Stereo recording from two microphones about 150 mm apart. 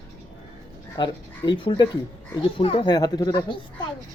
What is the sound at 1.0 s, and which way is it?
Speech, 30° left (ahead or behind).